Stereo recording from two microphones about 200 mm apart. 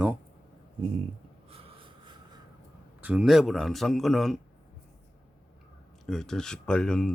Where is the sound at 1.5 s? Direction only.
30° right (ahead or behind).